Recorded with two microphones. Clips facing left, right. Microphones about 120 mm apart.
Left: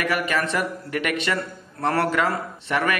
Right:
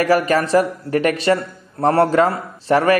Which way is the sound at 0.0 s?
35° right (ahead or behind).